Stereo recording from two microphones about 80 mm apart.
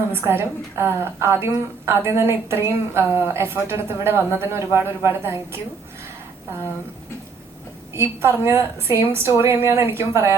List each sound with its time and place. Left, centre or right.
0.1 s a woman's voice: right
7.9 s a woman's voice: right